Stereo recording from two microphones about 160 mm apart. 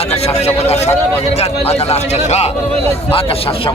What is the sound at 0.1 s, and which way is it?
A man's voice, 40° left (ahead or behind).